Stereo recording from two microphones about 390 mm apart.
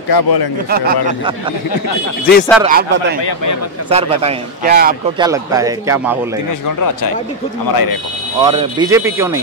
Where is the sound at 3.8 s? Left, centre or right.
Centre.